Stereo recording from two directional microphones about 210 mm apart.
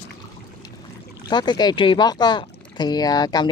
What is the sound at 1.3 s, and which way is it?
Speech, 20° left (ahead or behind).